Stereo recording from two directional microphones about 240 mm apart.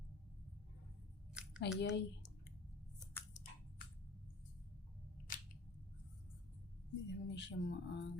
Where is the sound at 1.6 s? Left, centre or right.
Left.